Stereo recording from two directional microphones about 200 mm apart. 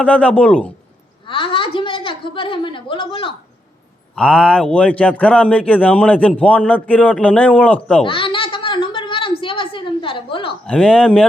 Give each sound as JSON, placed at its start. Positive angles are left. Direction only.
{"t": 0.0, "sound": "a man's voice", "side_deg": 5}
{"t": 1.3, "sound": "a woman's voice", "side_deg": 25}
{"t": 4.1, "sound": "a man's voice", "side_deg": 5}
{"t": 8.0, "sound": "a sound", "side_deg": 25}
{"t": 10.7, "sound": "speech", "side_deg": 5}